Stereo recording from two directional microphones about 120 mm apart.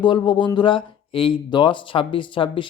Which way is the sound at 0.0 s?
40° left (ahead or behind).